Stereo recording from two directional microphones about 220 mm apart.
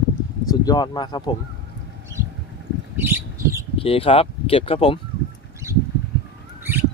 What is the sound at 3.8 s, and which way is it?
Speech, 25° left (ahead or behind).